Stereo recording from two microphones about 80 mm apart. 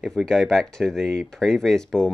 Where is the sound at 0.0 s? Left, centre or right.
Centre.